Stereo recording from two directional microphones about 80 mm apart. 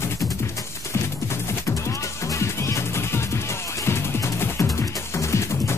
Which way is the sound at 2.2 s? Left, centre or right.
Left.